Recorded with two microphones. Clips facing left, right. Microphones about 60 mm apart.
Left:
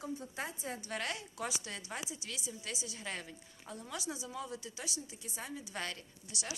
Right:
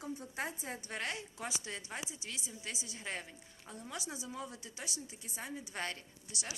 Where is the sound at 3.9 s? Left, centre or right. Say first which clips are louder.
Left 2 dB; right.